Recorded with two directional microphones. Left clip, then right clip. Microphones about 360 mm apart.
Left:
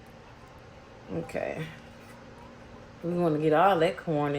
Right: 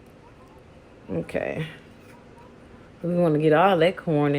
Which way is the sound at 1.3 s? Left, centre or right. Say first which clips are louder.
Right 4 dB; right.